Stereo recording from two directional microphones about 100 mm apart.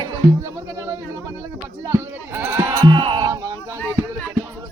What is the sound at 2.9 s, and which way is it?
Bleat, 55° right (ahead or behind).